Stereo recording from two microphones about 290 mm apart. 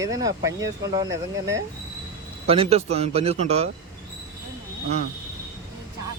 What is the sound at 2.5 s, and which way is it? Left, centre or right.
A man's voice, right.